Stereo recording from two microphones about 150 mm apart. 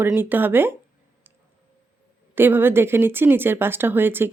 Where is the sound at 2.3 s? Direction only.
15° right (ahead or behind).